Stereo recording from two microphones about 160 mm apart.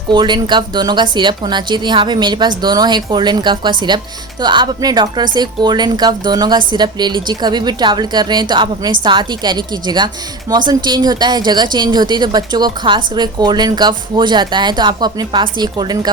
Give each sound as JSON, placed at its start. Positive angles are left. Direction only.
{"t": 0.1, "sound": "a woman's voice", "side_deg": -25}